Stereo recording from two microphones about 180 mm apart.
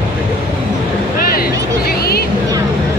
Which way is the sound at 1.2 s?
55° left (ahead or behind).